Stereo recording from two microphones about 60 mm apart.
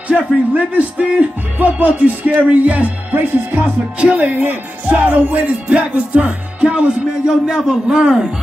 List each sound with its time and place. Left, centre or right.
0.1 s speech: right